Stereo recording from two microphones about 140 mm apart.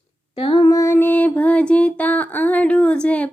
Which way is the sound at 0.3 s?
40° left (ahead or behind).